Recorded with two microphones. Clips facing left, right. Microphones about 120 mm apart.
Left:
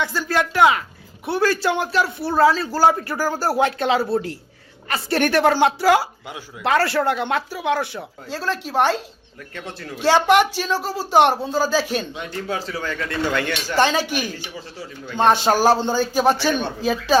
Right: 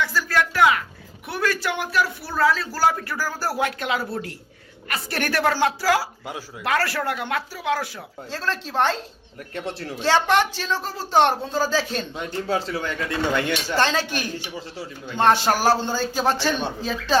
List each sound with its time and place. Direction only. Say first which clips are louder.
0.0 s a man's voice: left 1 dB; 25° left (ahead or behind)
8.3 s speech: left 3 dB; 10° left (ahead or behind)
9.6 s speech: right 3 dB; 30° right (ahead or behind)
10.0 s speech: left 4 dB; 15° left (ahead or behind)
12.5 s speech: right 2 dB; 25° right (ahead or behind)
13.7 s speech: left 5 dB; 15° left (ahead or behind)